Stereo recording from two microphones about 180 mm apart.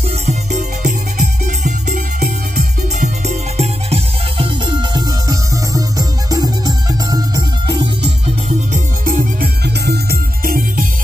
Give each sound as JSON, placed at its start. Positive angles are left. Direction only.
{"t": 0.3, "sound": "music", "side_deg": -45}
{"t": 1.6, "sound": "music", "side_deg": -60}
{"t": 3.0, "sound": "music", "side_deg": -40}
{"t": 4.9, "sound": "music", "side_deg": -20}
{"t": 8.7, "sound": "music", "side_deg": -45}